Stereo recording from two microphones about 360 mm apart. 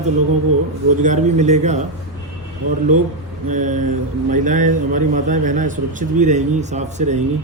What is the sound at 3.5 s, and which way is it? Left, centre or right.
A man's voice, right.